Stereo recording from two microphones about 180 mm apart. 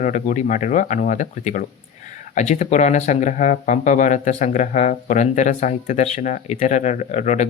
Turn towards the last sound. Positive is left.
turn(degrees=40)  # may be behind; listen again after turning